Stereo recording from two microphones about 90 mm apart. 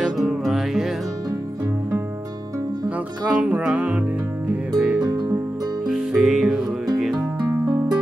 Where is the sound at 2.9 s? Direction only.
15° right (ahead or behind).